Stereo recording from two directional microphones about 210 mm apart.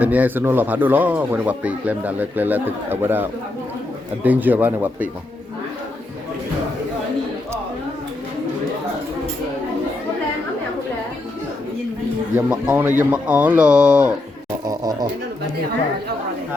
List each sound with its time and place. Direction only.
0.0 s speech: 5° right (ahead or behind)
12.5 s speech: 5° right (ahead or behind)
14.6 s speech: 20° right (ahead or behind)